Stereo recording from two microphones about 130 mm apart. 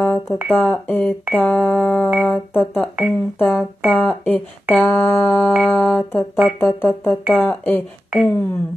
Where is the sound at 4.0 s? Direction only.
10° left (ahead or behind).